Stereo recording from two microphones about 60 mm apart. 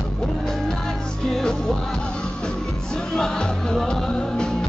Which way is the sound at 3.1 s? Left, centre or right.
Centre.